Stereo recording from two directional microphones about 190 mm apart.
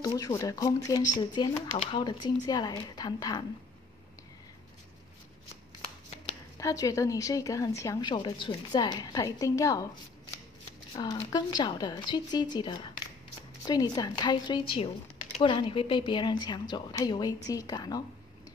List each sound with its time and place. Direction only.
0.0 s a woman's voice: 15° left (ahead or behind)
6.6 s a woman's voice: 15° left (ahead or behind)
11.0 s a woman's voice: 20° left (ahead or behind)